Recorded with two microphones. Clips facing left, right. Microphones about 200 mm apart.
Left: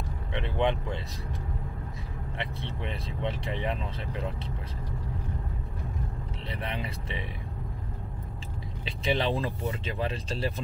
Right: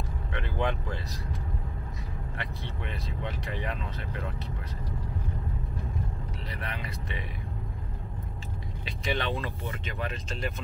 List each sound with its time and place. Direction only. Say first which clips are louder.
0.3 s speech: left 3 dB; 25° left (ahead or behind)
2.3 s speech: left 4 dB; 30° left (ahead or behind)
6.5 s speech: left 5 dB; 30° left (ahead or behind)
8.8 s vehicle: left 4 dB; 30° left (ahead or behind)
9.4 s speech: left 4 dB; 30° left (ahead or behind)